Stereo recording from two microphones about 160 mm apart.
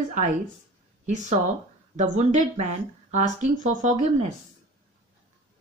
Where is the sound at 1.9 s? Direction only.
50° right (ahead or behind).